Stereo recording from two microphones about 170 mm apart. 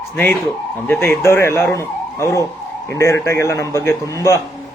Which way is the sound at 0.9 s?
15° left (ahead or behind).